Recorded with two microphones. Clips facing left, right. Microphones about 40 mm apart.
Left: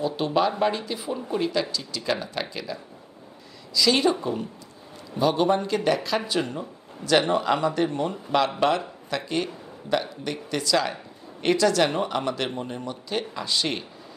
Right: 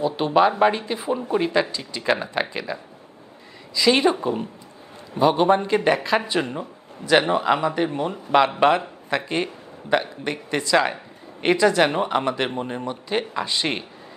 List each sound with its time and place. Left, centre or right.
0.0 s a man's voice: right